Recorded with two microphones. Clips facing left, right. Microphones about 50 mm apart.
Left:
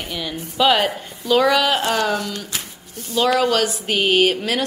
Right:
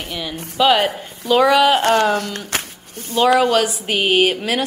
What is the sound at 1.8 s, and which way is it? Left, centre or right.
Speech, right.